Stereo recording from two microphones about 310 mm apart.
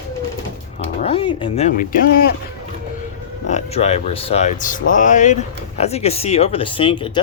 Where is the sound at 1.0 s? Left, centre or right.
Centre.